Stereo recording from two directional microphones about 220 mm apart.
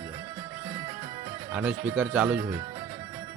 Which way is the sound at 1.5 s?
5° right (ahead or behind).